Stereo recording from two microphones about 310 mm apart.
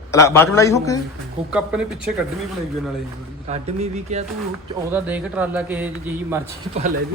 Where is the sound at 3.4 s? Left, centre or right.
Right.